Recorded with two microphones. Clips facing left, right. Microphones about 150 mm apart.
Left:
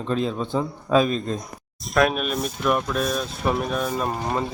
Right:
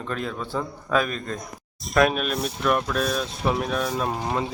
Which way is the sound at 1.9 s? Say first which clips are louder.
Even; centre (ahead or behind).